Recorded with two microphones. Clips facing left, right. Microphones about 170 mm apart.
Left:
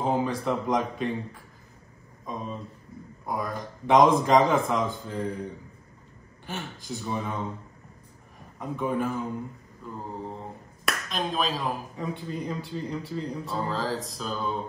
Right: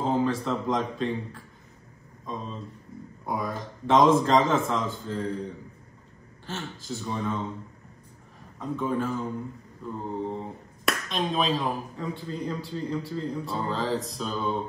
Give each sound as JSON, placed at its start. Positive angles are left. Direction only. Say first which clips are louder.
{"t": 0.0, "sound": "speech", "louder": "right 1 dB", "side_deg": 15}
{"t": 2.2, "sound": "a man's voice", "louder": "left 1 dB", "side_deg": 10}
{"t": 3.3, "sound": "speech", "louder": "right 1 dB", "side_deg": 0}
{"t": 3.8, "sound": "a man's voice", "louder": "even", "side_deg": 15}
{"t": 6.4, "sound": "a man's voice", "louder": "even", "side_deg": 15}
{"t": 8.5, "sound": "a man's voice", "louder": "even", "side_deg": 15}
{"t": 9.9, "sound": "speech", "louder": "right 5 dB", "side_deg": 0}
{"t": 12.0, "sound": "a man's voice", "louder": "even", "side_deg": 20}
{"t": 13.5, "sound": "speech", "louder": "right 1 dB", "side_deg": 0}